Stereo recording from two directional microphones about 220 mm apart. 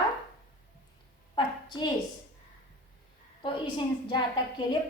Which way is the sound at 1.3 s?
20° left (ahead or behind).